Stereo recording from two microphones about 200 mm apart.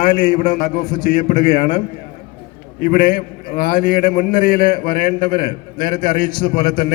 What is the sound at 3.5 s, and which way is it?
A man's voice, 50° left (ahead or behind).